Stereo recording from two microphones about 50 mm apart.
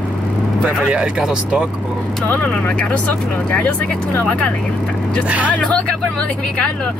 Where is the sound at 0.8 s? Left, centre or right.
Centre.